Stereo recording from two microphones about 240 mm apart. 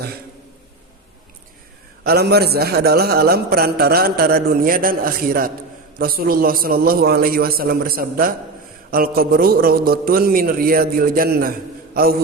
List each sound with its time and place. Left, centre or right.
2.0 s a man's voice: right